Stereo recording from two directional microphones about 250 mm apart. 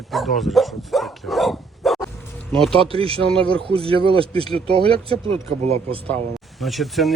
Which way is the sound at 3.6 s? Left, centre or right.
Right.